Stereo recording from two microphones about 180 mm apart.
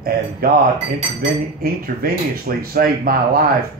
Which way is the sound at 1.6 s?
60° right (ahead or behind).